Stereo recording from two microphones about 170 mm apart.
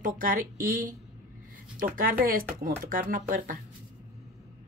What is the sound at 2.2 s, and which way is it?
Speech, 55° right (ahead or behind).